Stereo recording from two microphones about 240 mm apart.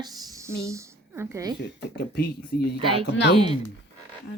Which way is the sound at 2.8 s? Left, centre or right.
Right.